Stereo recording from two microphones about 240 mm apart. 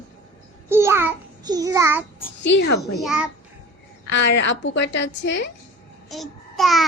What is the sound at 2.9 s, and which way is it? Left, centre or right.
Speech, centre.